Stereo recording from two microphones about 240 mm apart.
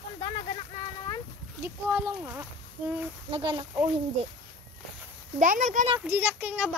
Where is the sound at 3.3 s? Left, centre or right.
Right.